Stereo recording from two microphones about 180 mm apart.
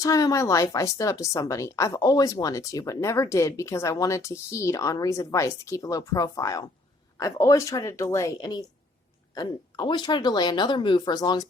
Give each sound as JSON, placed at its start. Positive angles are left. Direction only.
{"t": 0.0, "sound": "speech", "side_deg": 20}